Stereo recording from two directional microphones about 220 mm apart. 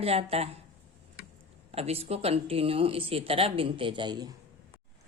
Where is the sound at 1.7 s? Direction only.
25° right (ahead or behind).